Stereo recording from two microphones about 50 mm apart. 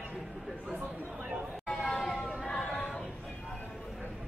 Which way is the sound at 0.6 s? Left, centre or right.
Right.